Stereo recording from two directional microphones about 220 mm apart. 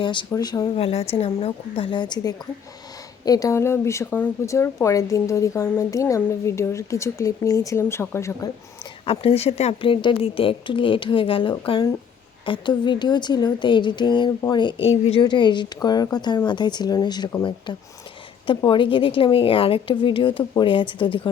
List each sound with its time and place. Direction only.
0.0 s a woman's voice: 20° left (ahead or behind)
9.0 s a woman's voice: 25° left (ahead or behind)